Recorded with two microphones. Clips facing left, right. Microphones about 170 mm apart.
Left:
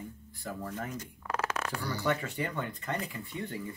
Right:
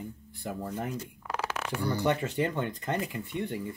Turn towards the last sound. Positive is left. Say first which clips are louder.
# right 5 dB
turn(degrees=-20)  # may be behind; listen again after turning